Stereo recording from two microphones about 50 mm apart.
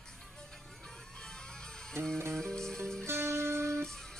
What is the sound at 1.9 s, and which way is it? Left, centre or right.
Music, right.